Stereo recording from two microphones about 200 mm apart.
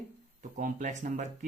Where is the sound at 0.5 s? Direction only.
40° right (ahead or behind).